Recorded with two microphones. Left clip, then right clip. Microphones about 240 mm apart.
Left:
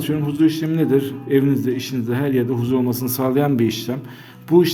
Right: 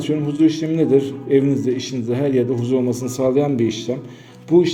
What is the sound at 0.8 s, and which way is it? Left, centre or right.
A man's voice, centre.